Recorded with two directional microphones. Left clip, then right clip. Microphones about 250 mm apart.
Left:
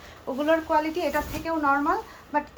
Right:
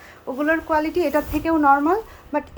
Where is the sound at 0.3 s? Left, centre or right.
Centre.